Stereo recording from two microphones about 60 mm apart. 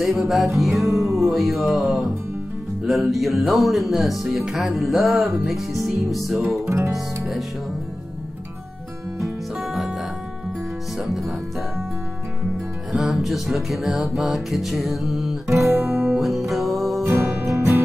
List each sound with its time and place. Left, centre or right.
0.0 s music: centre
6.6 s music: right
12.9 s music: centre
15.5 s guitar: right
16.2 s music: centre
17.0 s music: right